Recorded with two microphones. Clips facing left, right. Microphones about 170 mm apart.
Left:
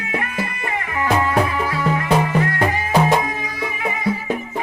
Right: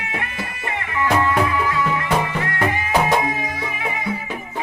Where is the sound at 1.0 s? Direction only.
40° left (ahead or behind).